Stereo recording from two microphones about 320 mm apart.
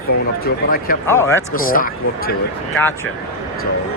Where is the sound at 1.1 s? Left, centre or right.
Centre.